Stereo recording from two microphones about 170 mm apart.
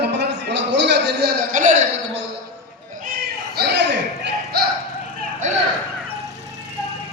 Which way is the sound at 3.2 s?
70° right (ahead or behind).